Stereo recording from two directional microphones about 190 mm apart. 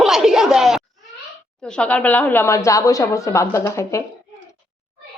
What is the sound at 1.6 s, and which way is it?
Speech, 5° left (ahead or behind).